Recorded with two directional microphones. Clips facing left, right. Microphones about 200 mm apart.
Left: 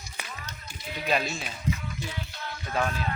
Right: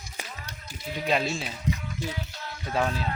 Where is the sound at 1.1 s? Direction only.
25° right (ahead or behind).